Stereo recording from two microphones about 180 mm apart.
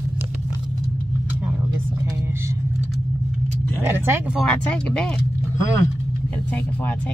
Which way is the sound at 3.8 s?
10° right (ahead or behind).